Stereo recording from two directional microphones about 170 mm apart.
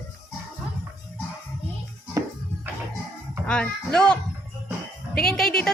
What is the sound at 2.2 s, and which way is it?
Music, 20° right (ahead or behind).